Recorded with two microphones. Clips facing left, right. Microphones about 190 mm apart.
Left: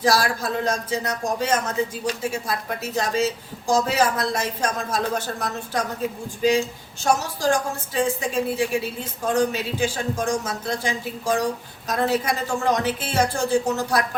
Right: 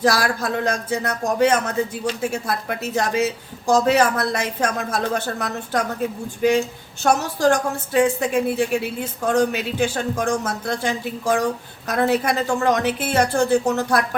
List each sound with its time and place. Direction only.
0.0 s a woman's voice: 60° right (ahead or behind)
7.0 s a woman's voice: 60° right (ahead or behind)